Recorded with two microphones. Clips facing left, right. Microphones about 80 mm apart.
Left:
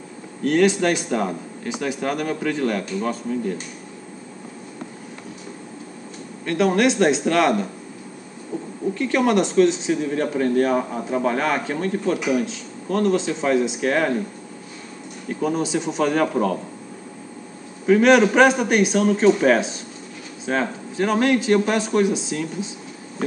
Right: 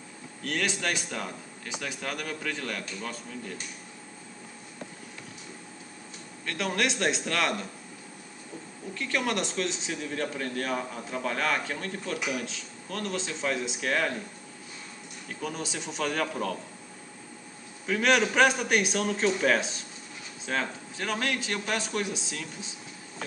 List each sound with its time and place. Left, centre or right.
0.4 s a man's voice: centre
6.4 s speech: centre
8.9 s a man's voice: centre
15.4 s a man's voice: centre
18.3 s a man's voice: centre